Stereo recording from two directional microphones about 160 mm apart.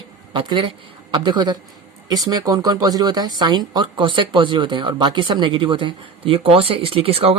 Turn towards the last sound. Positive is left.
turn(degrees=-35)  # may be behind; listen again after turning